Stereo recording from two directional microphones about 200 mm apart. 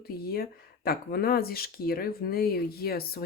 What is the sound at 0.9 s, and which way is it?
Speech, 50° left (ahead or behind).